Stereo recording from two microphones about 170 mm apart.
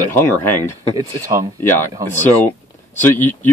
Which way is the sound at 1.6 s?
15° left (ahead or behind).